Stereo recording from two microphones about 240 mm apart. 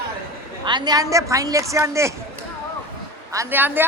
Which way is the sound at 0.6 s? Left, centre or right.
Centre.